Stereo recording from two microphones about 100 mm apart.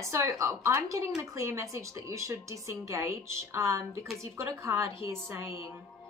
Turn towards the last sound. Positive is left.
turn(degrees=-25)  # may be behind; listen again after turning